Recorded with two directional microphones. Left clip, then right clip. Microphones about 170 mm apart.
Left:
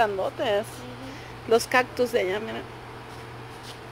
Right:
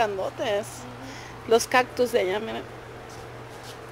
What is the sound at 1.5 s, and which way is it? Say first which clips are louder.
A woman's voice: right 1 dB; 5° right (ahead or behind).